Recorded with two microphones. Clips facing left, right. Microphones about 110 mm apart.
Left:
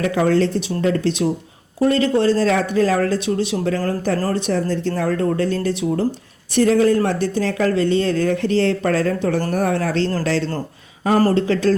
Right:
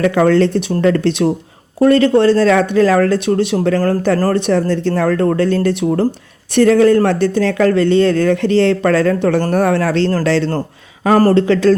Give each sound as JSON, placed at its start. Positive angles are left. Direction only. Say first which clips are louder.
{"t": 0.0, "sound": "speech", "louder": "right 5 dB", "side_deg": -70}
{"t": 11.3, "sound": "speech", "louder": "right 6 dB", "side_deg": -85}